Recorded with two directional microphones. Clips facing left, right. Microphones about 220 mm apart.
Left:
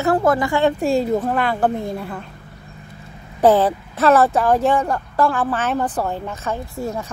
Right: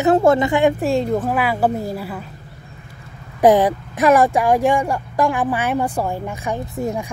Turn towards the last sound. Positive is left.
turn(degrees=-15)  # may be behind; listen again after turning